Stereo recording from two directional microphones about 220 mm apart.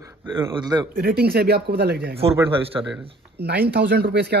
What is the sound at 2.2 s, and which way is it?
Speech, 25° right (ahead or behind).